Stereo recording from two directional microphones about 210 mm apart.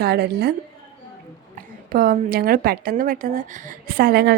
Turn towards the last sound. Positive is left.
turn(degrees=-45)  # may be behind; listen again after turning